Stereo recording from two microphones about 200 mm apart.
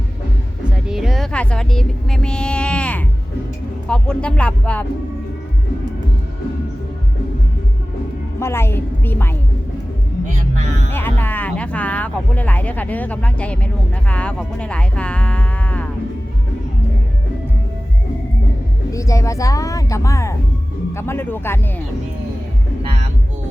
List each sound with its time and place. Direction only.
0.6 s a sound: centre (ahead or behind)
3.8 s speech: 5° left (ahead or behind)
8.4 s speech: 10° left (ahead or behind)
10.3 s music: 35° right (ahead or behind)
10.9 s speech: 10° left (ahead or behind)
18.9 s speech: 15° left (ahead or behind)